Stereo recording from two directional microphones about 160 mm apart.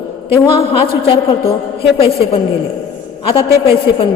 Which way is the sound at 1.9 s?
35° left (ahead or behind).